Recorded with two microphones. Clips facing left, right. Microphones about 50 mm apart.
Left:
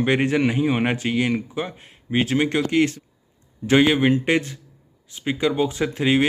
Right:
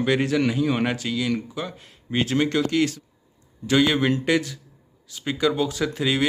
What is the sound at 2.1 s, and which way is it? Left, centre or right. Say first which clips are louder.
Speech: left 1 dB; centre.